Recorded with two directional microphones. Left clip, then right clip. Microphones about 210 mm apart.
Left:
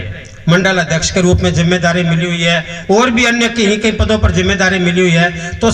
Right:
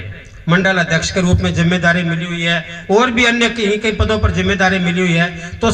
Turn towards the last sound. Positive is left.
turn(degrees=35)  # may be behind; listen again after turning